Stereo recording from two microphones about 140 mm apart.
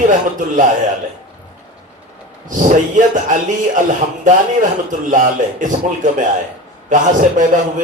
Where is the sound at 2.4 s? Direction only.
65° right (ahead or behind).